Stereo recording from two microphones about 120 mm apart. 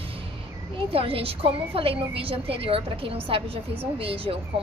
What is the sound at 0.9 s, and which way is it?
A woman's voice, 50° right (ahead or behind).